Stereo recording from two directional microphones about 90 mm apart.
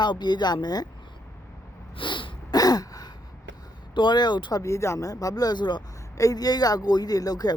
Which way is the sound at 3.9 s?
60° left (ahead or behind).